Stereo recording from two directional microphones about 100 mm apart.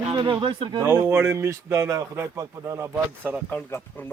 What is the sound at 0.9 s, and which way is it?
A man's voice, 20° right (ahead or behind).